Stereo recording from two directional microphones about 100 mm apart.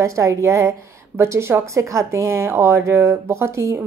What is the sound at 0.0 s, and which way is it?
A woman's voice, 30° right (ahead or behind).